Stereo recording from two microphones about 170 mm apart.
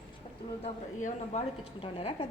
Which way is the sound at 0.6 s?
35° left (ahead or behind).